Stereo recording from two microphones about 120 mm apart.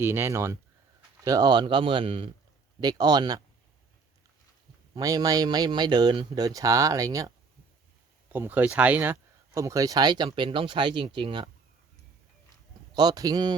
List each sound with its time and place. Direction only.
0.0 s speech: 20° right (ahead or behind); by 2.3 s 50° right (ahead or behind)
2.8 s speech: 35° right (ahead or behind)
4.9 s speech: 30° right (ahead or behind)
8.3 s speech: 15° right (ahead or behind)
9.6 s speech: 25° right (ahead or behind); by 11.4 s 45° right (ahead or behind)
12.9 s speech: 35° right (ahead or behind)